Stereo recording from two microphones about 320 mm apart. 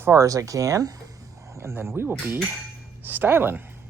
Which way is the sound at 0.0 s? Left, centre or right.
Centre.